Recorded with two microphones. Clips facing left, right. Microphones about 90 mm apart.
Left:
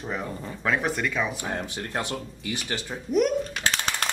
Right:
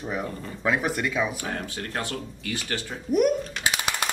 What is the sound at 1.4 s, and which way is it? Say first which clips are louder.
Speech: left 1 dB; 20° left (ahead or behind).